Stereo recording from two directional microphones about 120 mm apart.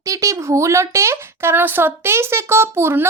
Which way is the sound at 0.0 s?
25° right (ahead or behind).